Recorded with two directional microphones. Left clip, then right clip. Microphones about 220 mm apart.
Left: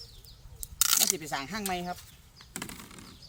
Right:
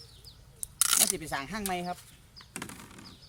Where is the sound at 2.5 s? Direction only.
20° left (ahead or behind).